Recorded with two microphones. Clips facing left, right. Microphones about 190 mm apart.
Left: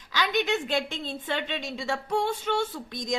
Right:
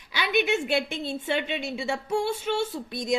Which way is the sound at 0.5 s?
15° right (ahead or behind).